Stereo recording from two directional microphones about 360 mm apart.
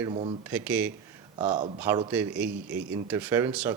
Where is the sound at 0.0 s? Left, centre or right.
Centre.